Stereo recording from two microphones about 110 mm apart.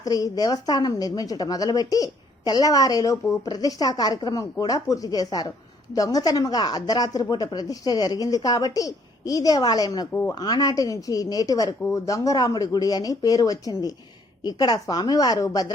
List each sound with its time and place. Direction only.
0.0 s a woman's voice: 35° left (ahead or behind)